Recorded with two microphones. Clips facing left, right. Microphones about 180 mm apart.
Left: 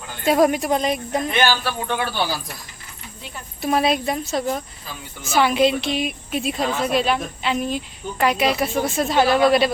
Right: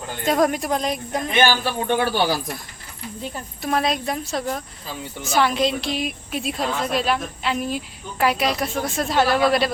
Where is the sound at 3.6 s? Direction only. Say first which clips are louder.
Left 3 dB; 5° left (ahead or behind).